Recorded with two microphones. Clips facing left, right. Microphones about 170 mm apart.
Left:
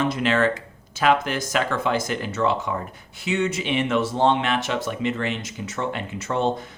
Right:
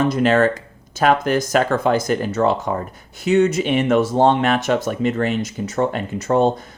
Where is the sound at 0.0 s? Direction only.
40° right (ahead or behind).